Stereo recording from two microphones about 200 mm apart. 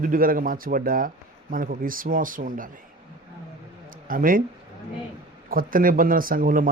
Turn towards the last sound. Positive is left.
turn(degrees=-45)  # may be behind; listen again after turning